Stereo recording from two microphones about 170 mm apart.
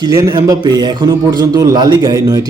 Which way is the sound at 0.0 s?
20° right (ahead or behind).